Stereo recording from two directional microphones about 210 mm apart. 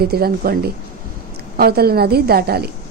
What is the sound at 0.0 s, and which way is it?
A woman's voice, 45° right (ahead or behind).